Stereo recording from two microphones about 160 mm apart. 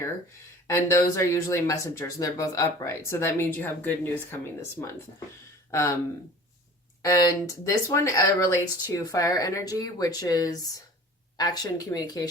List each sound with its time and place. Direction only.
0.7 s speech: 20° left (ahead or behind)
7.0 s speech: 20° left (ahead or behind)